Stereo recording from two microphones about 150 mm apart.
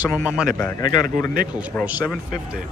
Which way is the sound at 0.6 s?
15° left (ahead or behind).